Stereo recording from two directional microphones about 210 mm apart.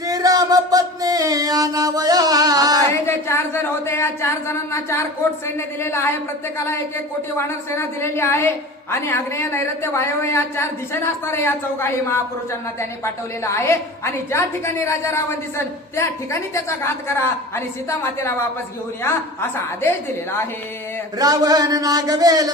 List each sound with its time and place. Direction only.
0.1 s music: 15° right (ahead or behind)
2.9 s a sound: 10° left (ahead or behind)
5.5 s a woman's voice: 10° left (ahead or behind)
7.3 s a woman's voice: 10° left (ahead or behind)
13.4 s a woman's voice: 15° left (ahead or behind)
21.2 s a man's voice: 15° right (ahead or behind)